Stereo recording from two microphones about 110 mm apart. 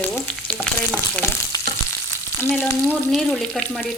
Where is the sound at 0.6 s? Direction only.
20° left (ahead or behind).